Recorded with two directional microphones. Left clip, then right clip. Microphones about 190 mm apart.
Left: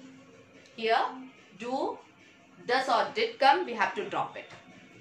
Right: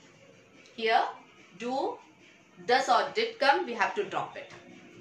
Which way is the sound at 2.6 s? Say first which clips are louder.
Right 2 dB; centre (ahead or behind).